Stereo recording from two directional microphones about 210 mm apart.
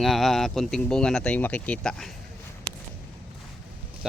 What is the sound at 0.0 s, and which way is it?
Speech, centre (ahead or behind).